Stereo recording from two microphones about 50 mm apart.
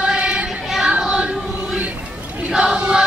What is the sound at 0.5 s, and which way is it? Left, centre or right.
Music, centre.